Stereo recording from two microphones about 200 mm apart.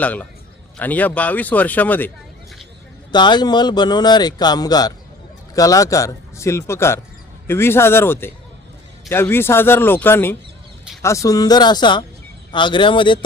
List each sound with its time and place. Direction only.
0.0 s a man's voice: 10° left (ahead or behind)
3.1 s a man's voice: 20° left (ahead or behind)